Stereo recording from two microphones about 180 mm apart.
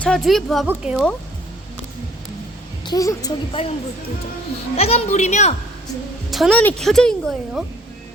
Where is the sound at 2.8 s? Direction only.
20° left (ahead or behind).